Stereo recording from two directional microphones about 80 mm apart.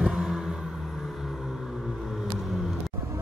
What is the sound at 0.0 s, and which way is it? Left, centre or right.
Vehicle, centre.